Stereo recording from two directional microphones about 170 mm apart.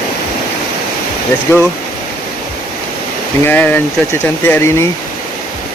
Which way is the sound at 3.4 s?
10° left (ahead or behind).